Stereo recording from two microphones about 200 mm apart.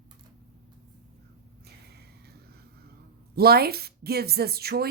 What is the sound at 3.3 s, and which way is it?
Speech, 50° right (ahead or behind).